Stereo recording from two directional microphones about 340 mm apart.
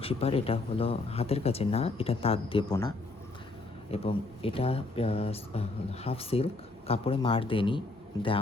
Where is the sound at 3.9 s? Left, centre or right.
Centre.